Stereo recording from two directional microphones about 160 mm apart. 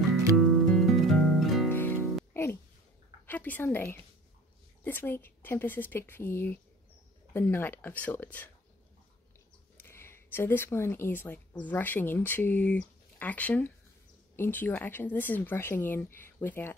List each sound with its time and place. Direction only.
0.4 s music: centre (ahead or behind)
1.7 s music: 15° left (ahead or behind)
3.3 s a woman's voice: 10° left (ahead or behind)
9.8 s speech: 15° left (ahead or behind)